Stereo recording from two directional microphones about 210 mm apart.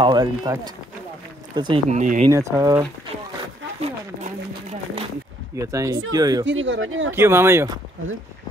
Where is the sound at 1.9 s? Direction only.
35° right (ahead or behind).